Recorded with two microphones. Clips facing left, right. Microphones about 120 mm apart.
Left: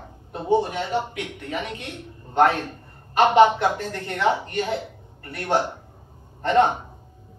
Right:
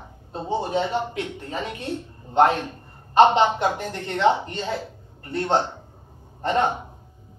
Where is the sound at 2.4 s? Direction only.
15° right (ahead or behind).